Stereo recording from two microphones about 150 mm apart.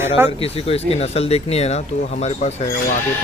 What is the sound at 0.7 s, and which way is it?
Speech, 40° left (ahead or behind).